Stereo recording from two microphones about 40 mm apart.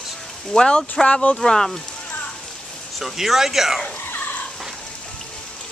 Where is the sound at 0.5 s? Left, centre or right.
Centre.